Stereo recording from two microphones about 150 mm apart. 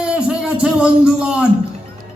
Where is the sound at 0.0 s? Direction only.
5° right (ahead or behind).